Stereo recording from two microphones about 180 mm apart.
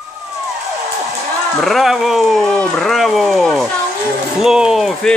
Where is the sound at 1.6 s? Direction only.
Centre (ahead or behind).